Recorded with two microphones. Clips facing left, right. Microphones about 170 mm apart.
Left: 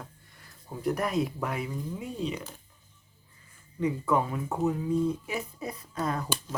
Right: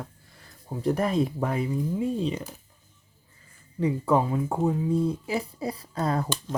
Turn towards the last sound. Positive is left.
turn(degrees=-30)  # may be behind; listen again after turning